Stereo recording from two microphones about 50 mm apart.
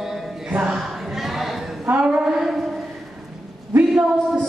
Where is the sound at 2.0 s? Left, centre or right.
Centre.